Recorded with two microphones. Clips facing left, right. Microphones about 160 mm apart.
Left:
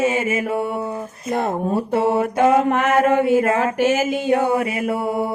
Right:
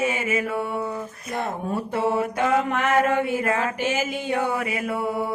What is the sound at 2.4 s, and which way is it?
Speech, 45° left (ahead or behind).